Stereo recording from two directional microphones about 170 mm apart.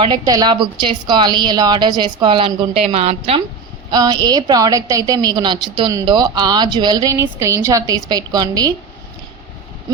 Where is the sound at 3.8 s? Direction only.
25° right (ahead or behind).